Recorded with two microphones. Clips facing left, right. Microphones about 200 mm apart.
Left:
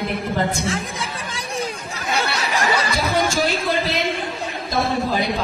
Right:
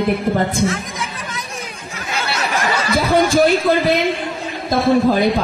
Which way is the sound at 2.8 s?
55° right (ahead or behind).